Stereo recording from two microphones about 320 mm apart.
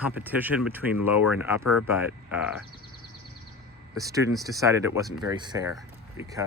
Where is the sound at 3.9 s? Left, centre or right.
Centre.